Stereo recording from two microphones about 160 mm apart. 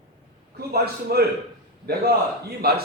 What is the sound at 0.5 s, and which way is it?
A man's voice, 80° right.